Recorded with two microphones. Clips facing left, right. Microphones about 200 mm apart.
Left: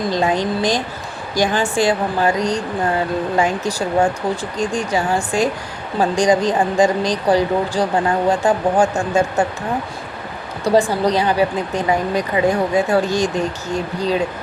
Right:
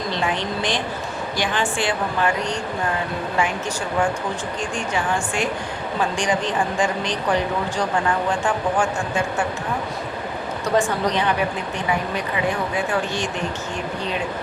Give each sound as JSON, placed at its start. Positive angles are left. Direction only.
{"t": 0.1, "sound": "speech", "side_deg": 40}
{"t": 10.6, "sound": "speech", "side_deg": 35}